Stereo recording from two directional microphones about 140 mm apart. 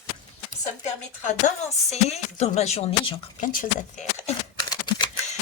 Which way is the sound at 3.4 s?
70° left (ahead or behind).